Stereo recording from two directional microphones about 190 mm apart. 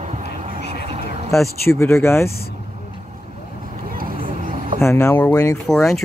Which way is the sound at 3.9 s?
50° right (ahead or behind).